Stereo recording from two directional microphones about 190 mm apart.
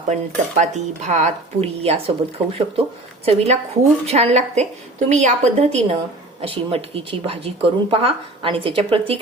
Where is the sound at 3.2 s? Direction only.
35° right (ahead or behind).